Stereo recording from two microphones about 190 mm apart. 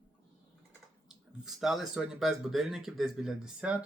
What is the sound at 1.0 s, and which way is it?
Speech, centre (ahead or behind).